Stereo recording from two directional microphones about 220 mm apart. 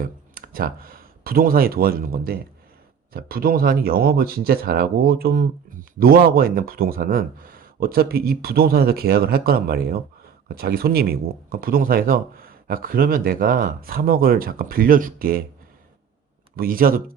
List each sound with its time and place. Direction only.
0.0 s speech: 40° right (ahead or behind)
16.6 s speech: 40° right (ahead or behind)